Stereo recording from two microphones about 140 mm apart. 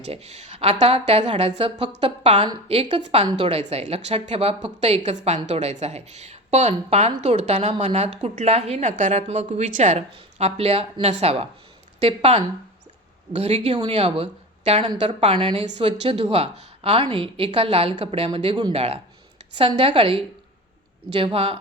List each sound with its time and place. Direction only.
0.0 s a woman's voice: 50° right (ahead or behind)
21.3 s a woman's voice: 40° right (ahead or behind)